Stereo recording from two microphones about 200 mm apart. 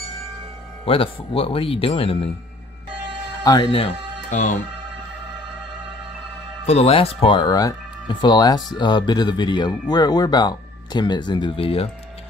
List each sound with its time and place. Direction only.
0.8 s speech: 25° left (ahead or behind)
3.4 s speech: 25° left (ahead or behind)
4.3 s speech: 40° left (ahead or behind)
6.6 s speech: 30° left (ahead or behind)